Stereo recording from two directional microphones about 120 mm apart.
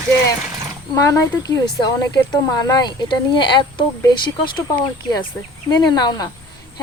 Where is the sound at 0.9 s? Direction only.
30° left (ahead or behind).